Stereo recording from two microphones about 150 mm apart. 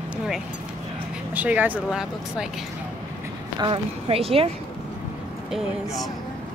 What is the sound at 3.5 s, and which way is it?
Speech, 35° right (ahead or behind).